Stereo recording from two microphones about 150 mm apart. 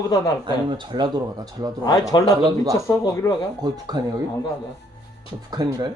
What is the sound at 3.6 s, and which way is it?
Speech, 25° right (ahead or behind).